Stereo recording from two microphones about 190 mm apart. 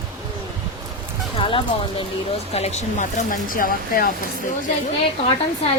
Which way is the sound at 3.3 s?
50° left (ahead or behind).